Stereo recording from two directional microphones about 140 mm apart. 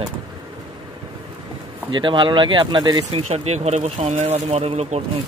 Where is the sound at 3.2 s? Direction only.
45° right (ahead or behind).